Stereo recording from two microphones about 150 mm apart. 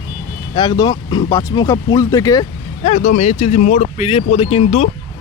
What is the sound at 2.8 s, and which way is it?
Speech, 55° left (ahead or behind).